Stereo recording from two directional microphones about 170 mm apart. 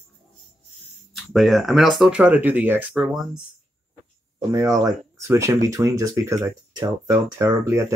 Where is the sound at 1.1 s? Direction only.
Centre (ahead or behind).